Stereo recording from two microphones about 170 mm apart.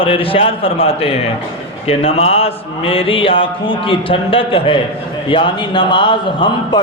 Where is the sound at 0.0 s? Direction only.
30° left (ahead or behind).